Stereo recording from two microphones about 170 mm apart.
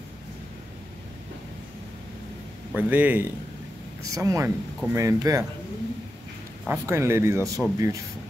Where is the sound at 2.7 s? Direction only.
10° right (ahead or behind).